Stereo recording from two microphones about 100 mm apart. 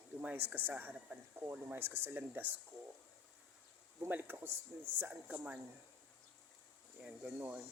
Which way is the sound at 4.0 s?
20° right (ahead or behind).